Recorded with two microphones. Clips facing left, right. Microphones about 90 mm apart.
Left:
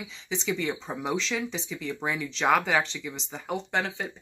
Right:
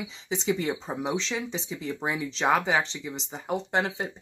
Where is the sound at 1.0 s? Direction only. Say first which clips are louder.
Left 1 dB; 25° right (ahead or behind).